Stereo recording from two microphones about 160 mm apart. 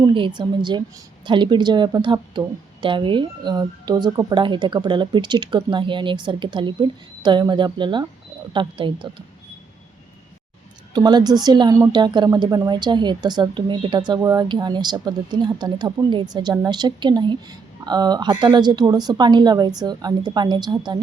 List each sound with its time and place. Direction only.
0.0 s a woman's voice: 30° right (ahead or behind)
10.9 s a woman's voice: 25° right (ahead or behind)